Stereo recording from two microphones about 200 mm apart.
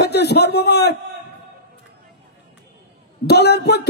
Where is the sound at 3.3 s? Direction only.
55° left (ahead or behind).